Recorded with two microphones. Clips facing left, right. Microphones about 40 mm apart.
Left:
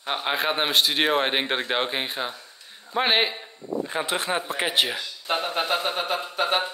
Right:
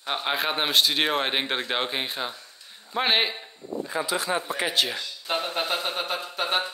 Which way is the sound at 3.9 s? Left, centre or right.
Left.